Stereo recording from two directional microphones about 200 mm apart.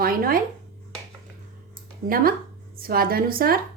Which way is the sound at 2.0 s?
45° right (ahead or behind).